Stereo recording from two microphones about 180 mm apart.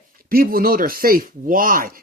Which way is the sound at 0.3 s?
55° right (ahead or behind).